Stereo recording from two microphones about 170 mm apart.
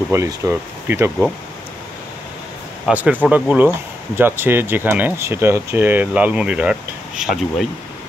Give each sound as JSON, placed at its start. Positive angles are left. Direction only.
{"t": 0.1, "sound": "speech", "side_deg": -20}
{"t": 2.9, "sound": "speech", "side_deg": -10}